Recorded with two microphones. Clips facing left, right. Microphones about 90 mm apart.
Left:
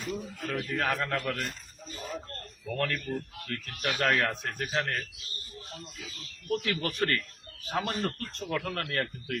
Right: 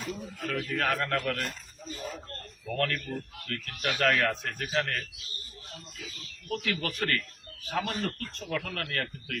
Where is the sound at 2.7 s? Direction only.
20° left (ahead or behind).